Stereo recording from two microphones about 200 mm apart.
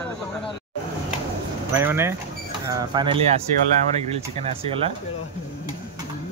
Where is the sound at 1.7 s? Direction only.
10° right (ahead or behind).